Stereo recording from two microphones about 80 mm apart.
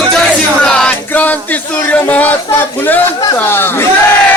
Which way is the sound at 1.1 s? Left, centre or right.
Left.